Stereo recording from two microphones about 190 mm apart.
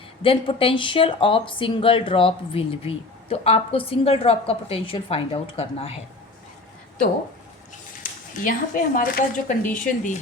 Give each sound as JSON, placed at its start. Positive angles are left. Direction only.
{"t": 0.2, "sound": "speech", "side_deg": 30}
{"t": 8.4, "sound": "speech", "side_deg": 45}